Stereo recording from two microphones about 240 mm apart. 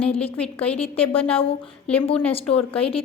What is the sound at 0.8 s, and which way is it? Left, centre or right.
A woman's voice, left.